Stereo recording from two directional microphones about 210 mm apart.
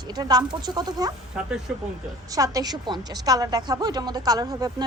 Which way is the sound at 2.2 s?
15° right (ahead or behind).